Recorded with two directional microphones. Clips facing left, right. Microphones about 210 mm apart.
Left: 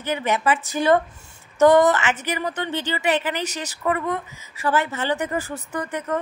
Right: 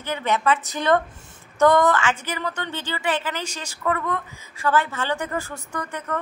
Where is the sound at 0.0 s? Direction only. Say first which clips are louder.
Left 1 dB; 10° left (ahead or behind).